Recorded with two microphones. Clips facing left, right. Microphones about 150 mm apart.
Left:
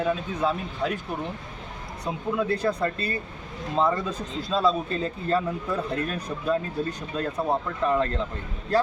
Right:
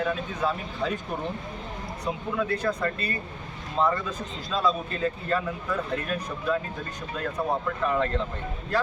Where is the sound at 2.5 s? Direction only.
30° left (ahead or behind).